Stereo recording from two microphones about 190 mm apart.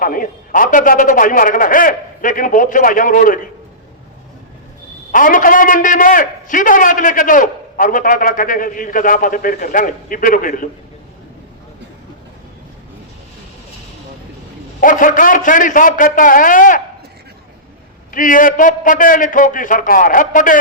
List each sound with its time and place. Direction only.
0.0 s a man's voice: 45° left (ahead or behind)
5.1 s a man's voice: 45° left (ahead or behind)
14.8 s a man's voice: 45° left (ahead or behind)
18.1 s a man's voice: 45° left (ahead or behind)